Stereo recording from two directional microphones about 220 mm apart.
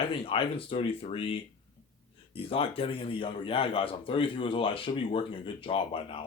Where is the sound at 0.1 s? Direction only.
25° left (ahead or behind).